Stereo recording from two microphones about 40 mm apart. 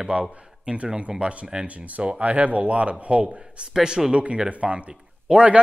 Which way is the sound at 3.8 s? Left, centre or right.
Centre.